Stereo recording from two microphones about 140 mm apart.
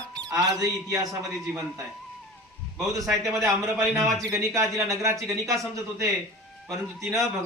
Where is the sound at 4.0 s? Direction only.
Centre (ahead or behind).